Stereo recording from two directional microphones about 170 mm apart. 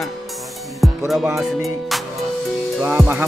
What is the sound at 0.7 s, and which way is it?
Music, 5° right (ahead or behind).